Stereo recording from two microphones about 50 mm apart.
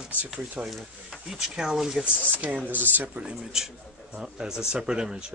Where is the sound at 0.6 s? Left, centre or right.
Centre.